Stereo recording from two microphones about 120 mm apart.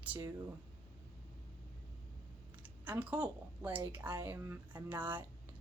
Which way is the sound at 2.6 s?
15° right (ahead or behind).